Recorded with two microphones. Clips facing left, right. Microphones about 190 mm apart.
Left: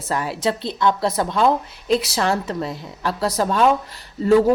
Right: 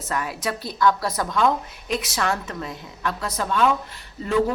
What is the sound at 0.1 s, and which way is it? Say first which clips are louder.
A woman's voice: left 5 dB; 30° left (ahead or behind).